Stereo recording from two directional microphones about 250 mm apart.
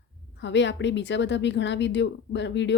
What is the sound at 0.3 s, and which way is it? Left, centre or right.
A woman's voice, left.